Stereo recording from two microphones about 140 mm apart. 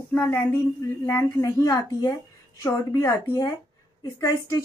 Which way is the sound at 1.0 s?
20° left (ahead or behind).